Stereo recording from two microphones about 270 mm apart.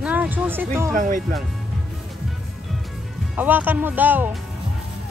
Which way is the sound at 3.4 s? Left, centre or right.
Centre.